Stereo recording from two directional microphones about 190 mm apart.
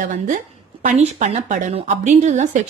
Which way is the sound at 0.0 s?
40° right (ahead or behind).